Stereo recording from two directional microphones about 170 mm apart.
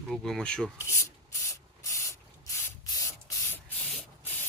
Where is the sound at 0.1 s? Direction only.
5° left (ahead or behind).